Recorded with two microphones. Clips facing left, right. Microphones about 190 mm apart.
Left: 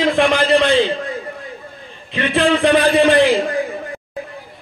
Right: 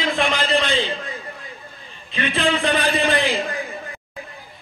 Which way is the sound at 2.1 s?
65° left (ahead or behind).